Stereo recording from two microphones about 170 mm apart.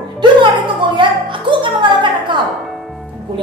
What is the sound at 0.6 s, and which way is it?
Music, 30° right (ahead or behind).